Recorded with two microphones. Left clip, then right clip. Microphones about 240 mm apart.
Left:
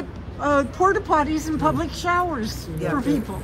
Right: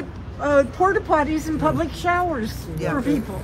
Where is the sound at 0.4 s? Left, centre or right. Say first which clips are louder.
Right 2 dB; centre.